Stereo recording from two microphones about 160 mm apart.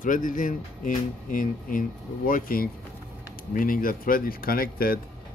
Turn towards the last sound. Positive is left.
turn(degrees=65)  # may be behind; listen again after turning